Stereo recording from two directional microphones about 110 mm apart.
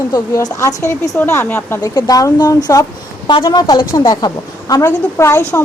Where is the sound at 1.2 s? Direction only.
20° left (ahead or behind).